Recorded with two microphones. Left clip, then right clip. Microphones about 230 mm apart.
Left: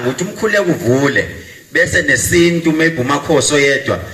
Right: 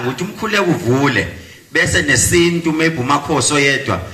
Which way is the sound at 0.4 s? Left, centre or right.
Centre.